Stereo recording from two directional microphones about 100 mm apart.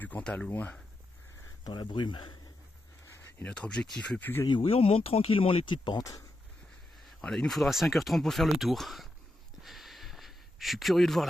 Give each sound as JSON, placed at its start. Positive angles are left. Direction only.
{"t": 0.0, "sound": "speech", "side_deg": 15}
{"t": 1.6, "sound": "speech", "side_deg": 50}
{"t": 3.3, "sound": "speech", "side_deg": 10}
{"t": 4.4, "sound": "speech", "side_deg": 60}
{"t": 6.0, "sound": "speech", "side_deg": 35}
{"t": 7.2, "sound": "speech", "side_deg": 5}
{"t": 9.6, "sound": "a sound", "side_deg": 0}